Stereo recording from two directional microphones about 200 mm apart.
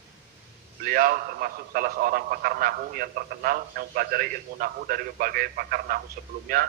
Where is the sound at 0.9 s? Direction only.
45° right (ahead or behind).